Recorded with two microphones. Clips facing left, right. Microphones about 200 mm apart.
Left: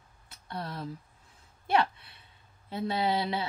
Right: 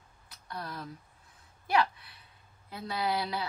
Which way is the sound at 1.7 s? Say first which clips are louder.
Left 1 dB; 25° left (ahead or behind).